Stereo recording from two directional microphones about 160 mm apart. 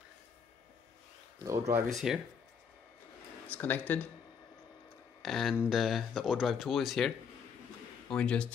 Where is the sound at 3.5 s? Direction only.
10° left (ahead or behind).